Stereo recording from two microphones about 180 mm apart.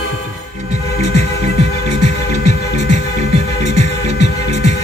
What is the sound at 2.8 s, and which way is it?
Music, 40° right (ahead or behind).